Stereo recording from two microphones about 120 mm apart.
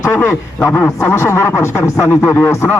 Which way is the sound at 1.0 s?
20° left (ahead or behind).